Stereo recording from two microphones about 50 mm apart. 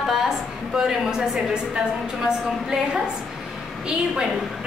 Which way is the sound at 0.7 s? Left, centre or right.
Centre.